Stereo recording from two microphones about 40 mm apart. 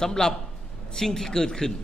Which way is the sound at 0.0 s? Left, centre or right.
Centre.